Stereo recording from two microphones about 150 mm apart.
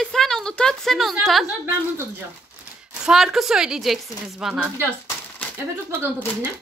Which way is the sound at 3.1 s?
Centre (ahead or behind).